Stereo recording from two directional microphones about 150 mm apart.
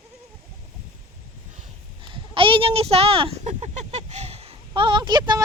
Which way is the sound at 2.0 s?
35° right (ahead or behind).